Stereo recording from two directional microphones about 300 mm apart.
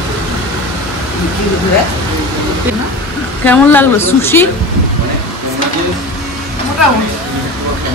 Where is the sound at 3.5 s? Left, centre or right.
Centre.